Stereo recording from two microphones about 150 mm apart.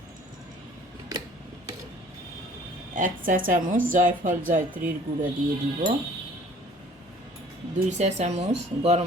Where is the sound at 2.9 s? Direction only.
60° right (ahead or behind).